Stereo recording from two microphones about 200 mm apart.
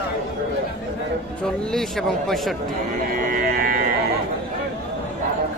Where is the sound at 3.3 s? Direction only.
45° right (ahead or behind).